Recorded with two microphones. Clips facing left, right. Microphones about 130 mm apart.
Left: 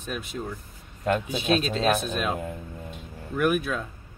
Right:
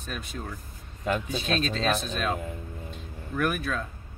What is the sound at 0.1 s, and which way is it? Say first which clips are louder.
Speech: left 4 dB; 10° left (ahead or behind).